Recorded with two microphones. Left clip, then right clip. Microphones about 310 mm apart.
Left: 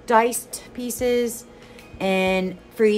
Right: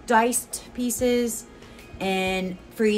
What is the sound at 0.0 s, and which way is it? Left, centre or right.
A woman's voice, centre.